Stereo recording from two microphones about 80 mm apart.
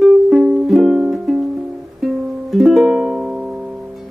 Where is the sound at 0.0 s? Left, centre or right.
Centre.